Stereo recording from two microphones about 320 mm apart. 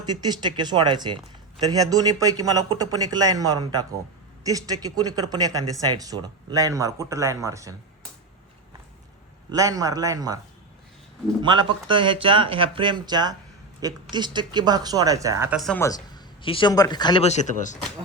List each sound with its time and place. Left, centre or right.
0.0 s a man's voice: centre
9.5 s a man's voice: centre
11.4 s a man's voice: centre; by 17.7 s left